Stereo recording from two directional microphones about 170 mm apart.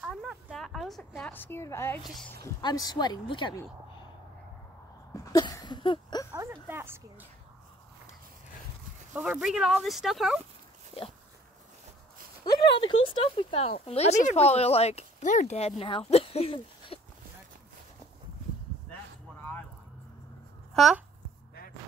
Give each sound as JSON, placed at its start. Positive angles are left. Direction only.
{"t": 0.0, "sound": "a sound", "side_deg": 0}
{"t": 1.3, "sound": "a woman's voice", "side_deg": 10}
{"t": 5.2, "sound": "a sound", "side_deg": 20}
{"t": 6.3, "sound": "speech", "side_deg": -20}
{"t": 9.1, "sound": "speech", "side_deg": -5}
{"t": 12.7, "sound": "speech", "side_deg": 30}
{"t": 20.7, "sound": "a child's voice", "side_deg": 0}